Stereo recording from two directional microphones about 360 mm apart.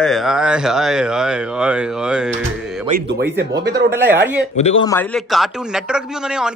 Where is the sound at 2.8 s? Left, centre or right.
Right.